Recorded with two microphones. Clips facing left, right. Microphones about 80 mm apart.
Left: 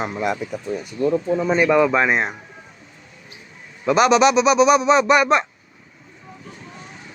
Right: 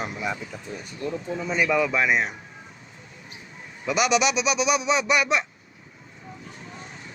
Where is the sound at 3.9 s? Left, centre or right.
Left.